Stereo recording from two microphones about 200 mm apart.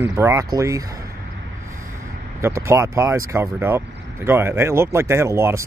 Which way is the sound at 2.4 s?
15° right (ahead or behind).